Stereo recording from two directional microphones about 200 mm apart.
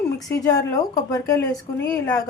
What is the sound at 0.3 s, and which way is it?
A woman's voice, 15° left (ahead or behind).